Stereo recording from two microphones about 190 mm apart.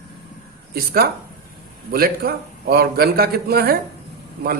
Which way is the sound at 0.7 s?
55° right (ahead or behind).